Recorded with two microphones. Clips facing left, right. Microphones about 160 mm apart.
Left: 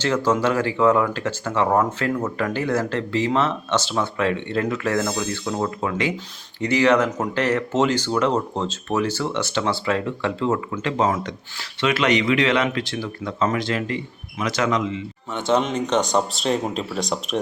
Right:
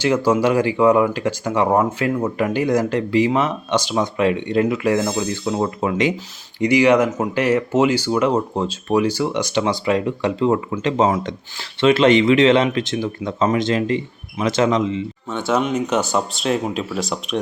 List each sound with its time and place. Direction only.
0.0 s speech: 10° right (ahead or behind); by 15.0 s 25° right (ahead or behind)
15.4 s speech: 5° right (ahead or behind)